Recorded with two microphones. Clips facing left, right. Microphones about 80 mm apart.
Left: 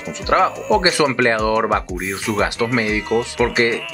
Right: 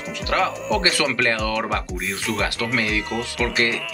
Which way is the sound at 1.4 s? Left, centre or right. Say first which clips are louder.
Left 7 dB; left.